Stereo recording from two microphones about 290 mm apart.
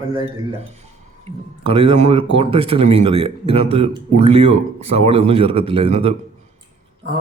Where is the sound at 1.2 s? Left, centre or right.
Centre.